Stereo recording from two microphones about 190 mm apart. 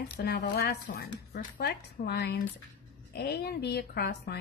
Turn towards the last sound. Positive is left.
turn(degrees=55)  # may be behind; listen again after turning